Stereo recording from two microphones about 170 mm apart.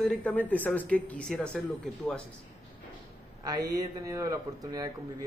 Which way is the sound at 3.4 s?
25° right (ahead or behind).